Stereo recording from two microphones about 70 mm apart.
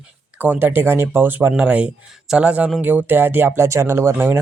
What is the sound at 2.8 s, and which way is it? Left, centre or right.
Speech, right.